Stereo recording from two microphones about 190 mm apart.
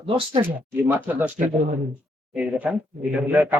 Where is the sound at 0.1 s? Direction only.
30° right (ahead or behind).